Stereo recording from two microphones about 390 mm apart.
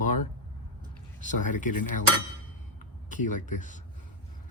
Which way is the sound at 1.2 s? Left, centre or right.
Centre.